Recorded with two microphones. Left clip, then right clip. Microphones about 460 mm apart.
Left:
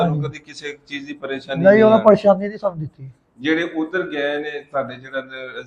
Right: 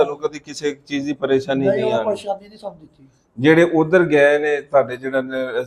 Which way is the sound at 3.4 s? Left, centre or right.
Right.